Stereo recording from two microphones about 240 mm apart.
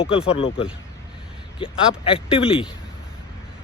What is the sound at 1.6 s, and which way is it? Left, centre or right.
Speech, left.